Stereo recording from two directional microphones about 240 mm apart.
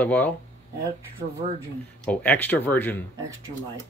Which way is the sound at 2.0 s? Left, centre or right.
Centre.